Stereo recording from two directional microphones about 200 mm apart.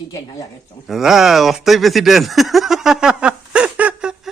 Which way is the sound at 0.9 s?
Centre (ahead or behind).